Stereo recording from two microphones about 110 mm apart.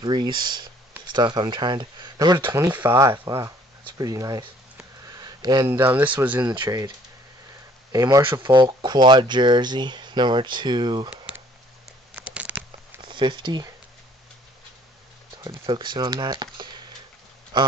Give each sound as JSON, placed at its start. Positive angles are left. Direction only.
{"t": 0.0, "sound": "speech", "side_deg": -40}
{"t": 2.4, "sound": "speech", "side_deg": -20}
{"t": 5.0, "sound": "a sound", "side_deg": -35}
{"t": 5.7, "sound": "speech", "side_deg": -20}
{"t": 7.9, "sound": "speech", "side_deg": -35}
{"t": 8.4, "sound": "speech", "side_deg": -45}
{"t": 11.3, "sound": "a sound", "side_deg": -10}
{"t": 13.0, "sound": "speech", "side_deg": -45}
{"t": 15.3, "sound": "speech", "side_deg": -45}